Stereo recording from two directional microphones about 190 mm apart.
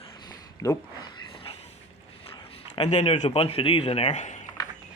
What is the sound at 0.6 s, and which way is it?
Speech, 15° left (ahead or behind).